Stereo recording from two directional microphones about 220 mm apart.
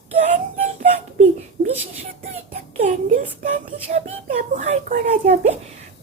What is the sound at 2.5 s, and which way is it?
Child singing, 30° right (ahead or behind).